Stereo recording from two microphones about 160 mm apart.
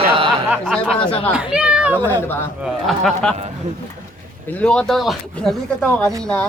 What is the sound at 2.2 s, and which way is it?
A man's voice, 15° left (ahead or behind).